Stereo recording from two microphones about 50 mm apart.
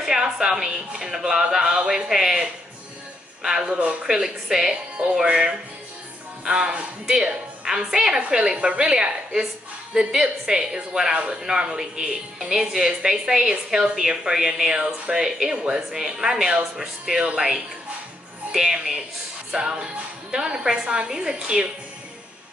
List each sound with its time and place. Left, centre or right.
0.0 s a woman's voice: centre
18.5 s a woman's voice: centre